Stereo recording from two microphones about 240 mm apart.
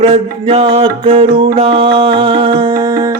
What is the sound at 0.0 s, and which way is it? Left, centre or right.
Music, right.